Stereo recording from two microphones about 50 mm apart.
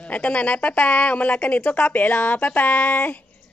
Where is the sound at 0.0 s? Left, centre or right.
Left.